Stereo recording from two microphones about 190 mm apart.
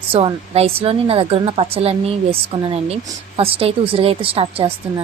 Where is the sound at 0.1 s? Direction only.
30° right (ahead or behind).